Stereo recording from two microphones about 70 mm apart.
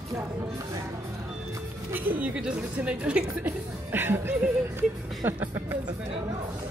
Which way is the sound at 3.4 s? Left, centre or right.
Right.